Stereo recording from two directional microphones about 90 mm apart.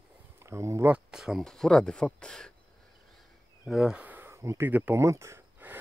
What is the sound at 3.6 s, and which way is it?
Speech, 5° right (ahead or behind).